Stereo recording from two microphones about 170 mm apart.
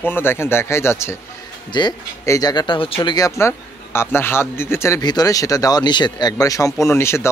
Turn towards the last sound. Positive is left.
turn(degrees=15)  # may be behind; listen again after turning